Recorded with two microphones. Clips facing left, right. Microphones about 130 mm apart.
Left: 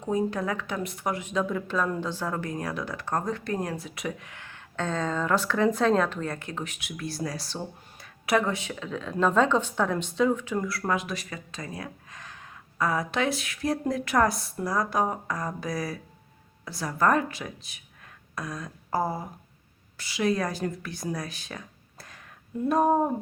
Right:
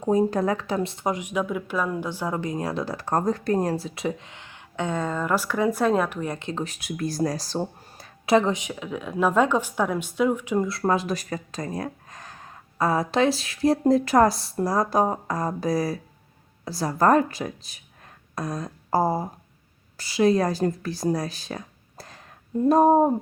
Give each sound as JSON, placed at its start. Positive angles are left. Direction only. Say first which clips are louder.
{"t": 0.0, "sound": "speech", "louder": "right 6 dB", "side_deg": -35}